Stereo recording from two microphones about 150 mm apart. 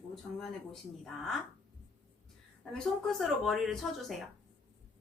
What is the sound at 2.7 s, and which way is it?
Speech, centre (ahead or behind).